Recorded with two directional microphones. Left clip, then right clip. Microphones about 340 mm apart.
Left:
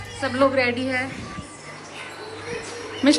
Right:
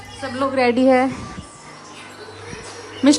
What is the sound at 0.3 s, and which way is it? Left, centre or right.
Speech, centre.